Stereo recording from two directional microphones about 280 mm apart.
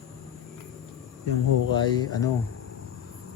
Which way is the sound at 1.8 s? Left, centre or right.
Centre.